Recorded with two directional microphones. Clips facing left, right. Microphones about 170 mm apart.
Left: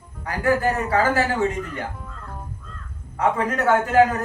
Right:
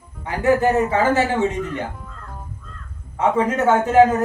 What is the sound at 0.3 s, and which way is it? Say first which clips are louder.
A man's voice: right 4 dB; 20° right (ahead or behind).